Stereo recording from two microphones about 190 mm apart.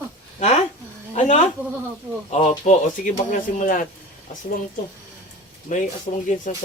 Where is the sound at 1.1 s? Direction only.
40° left (ahead or behind).